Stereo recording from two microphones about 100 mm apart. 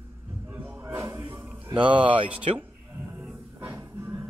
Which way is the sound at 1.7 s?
55° right (ahead or behind).